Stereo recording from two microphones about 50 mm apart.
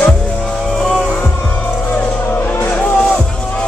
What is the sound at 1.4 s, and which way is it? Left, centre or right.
Music, left.